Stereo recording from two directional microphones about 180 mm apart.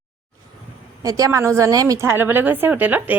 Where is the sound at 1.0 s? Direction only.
20° right (ahead or behind).